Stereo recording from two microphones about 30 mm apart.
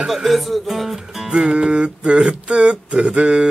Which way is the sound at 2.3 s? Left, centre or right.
Right.